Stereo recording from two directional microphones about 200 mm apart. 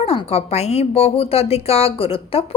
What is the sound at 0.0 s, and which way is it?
A woman's voice, 30° left (ahead or behind).